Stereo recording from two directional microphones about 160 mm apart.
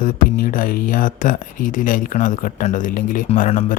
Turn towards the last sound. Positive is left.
turn(degrees=50)  # may be behind; listen again after turning